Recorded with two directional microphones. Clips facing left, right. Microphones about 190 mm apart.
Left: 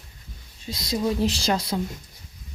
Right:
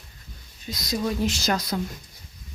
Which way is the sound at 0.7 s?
30° left (ahead or behind).